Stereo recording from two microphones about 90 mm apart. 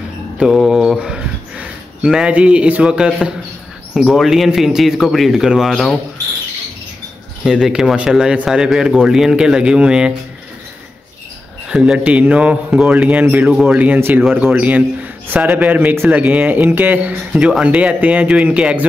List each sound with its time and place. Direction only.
0.4 s speech: 5° right (ahead or behind)
7.4 s speech: 5° right (ahead or behind)
11.7 s speech: 10° right (ahead or behind)
13.5 s speech: 5° right (ahead or behind)
13.9 s speech: 25° right (ahead or behind)